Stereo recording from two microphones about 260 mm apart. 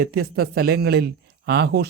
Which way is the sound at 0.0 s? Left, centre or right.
Right.